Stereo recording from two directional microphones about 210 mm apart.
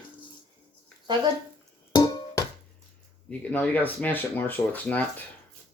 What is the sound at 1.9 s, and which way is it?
Music, 15° left (ahead or behind).